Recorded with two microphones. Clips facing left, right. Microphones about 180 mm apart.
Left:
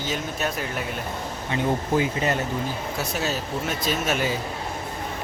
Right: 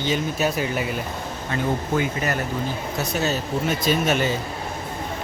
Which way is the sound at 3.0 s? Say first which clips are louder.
Right 4 dB; 5° left (ahead or behind).